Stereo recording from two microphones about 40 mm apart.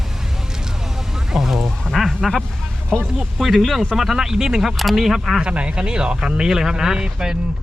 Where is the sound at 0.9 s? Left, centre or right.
Centre.